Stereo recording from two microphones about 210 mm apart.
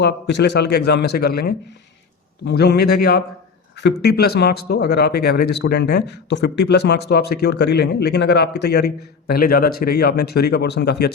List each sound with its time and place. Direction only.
0.0 s speech: 55° left (ahead or behind)